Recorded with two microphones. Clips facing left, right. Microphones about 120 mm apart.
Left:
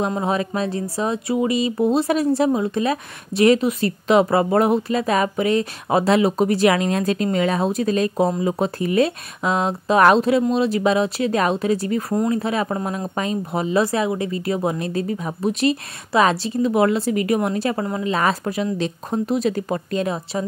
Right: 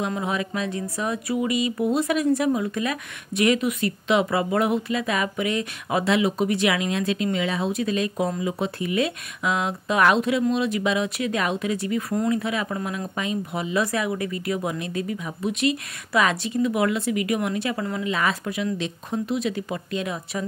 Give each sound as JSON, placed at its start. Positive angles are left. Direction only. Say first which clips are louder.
{"t": 0.0, "sound": "speech", "louder": "left 5 dB", "side_deg": 35}